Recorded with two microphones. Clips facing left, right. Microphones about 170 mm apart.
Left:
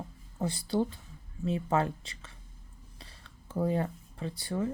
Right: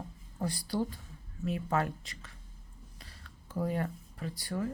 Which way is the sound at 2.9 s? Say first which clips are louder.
Left 3 dB; 30° left (ahead or behind).